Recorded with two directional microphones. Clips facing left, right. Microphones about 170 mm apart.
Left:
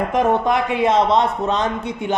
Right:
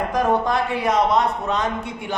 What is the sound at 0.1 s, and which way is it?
Speech, 20° left (ahead or behind).